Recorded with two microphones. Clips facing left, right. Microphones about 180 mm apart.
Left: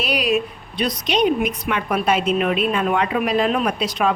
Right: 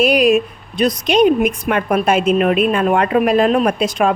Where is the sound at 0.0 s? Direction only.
50° right (ahead or behind).